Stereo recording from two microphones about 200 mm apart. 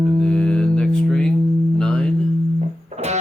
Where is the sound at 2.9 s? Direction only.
35° right (ahead or behind).